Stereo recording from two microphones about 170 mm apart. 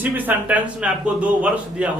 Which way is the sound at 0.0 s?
10° right (ahead or behind).